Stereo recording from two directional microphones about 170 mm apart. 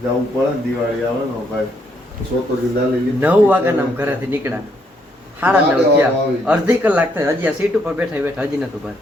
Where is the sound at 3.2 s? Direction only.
10° right (ahead or behind).